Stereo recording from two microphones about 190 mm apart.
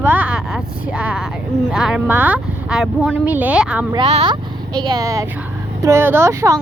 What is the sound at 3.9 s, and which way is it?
Speech, 30° right (ahead or behind).